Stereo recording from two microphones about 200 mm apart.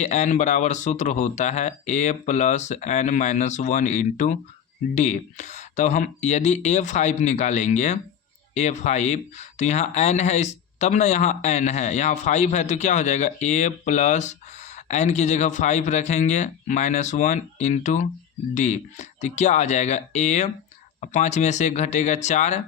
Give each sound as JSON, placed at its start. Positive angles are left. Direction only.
{"t": 0.0, "sound": "speech", "side_deg": 35}